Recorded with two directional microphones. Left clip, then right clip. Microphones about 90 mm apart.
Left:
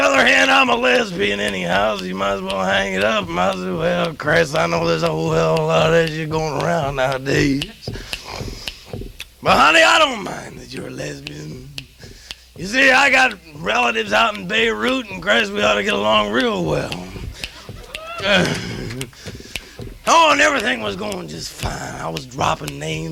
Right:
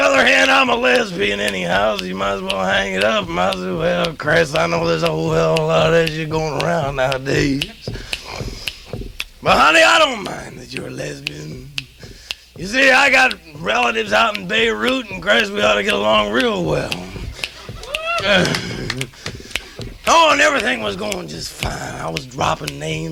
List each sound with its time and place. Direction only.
0.0 s speech: 35° right (ahead or behind)
7.9 s a sound: 35° right (ahead or behind)
9.1 s speech: 35° right (ahead or behind); by 11.3 s 20° right (ahead or behind)
12.5 s speech: 40° right (ahead or behind); by 17.5 s 25° right (ahead or behind)
17.9 s a sound: 30° right (ahead or behind)
20.1 s speech: 30° right (ahead or behind)